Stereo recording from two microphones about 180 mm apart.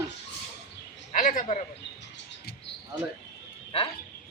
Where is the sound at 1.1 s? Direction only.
50° left (ahead or behind).